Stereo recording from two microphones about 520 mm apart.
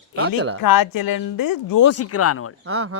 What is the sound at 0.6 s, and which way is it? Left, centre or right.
Speech, left.